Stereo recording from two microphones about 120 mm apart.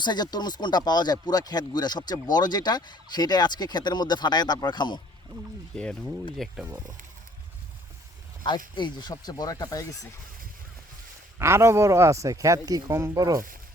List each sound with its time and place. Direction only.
0.0 s speech: 35° left (ahead or behind)
5.7 s speech: 5° left (ahead or behind)
8.4 s speech: 40° left (ahead or behind)
11.3 s speech: 20° right (ahead or behind)